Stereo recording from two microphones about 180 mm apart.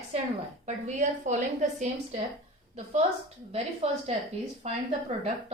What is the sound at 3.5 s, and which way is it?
A woman's voice, 35° right (ahead or behind).